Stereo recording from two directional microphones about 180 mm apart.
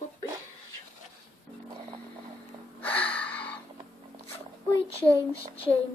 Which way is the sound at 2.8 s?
10° left (ahead or behind).